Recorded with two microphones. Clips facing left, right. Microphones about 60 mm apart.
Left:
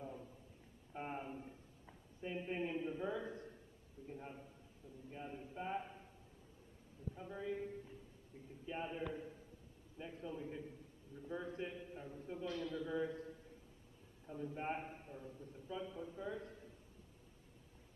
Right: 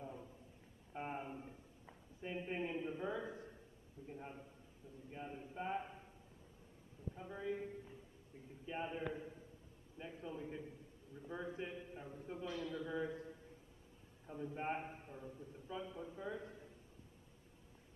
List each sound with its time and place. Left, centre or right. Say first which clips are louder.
0.0 s a sound: even; centre
4.1 s a man's voice: even; centre
7.2 s a man's voice: even; centre